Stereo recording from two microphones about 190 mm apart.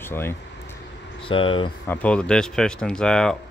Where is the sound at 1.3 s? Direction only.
25° left (ahead or behind).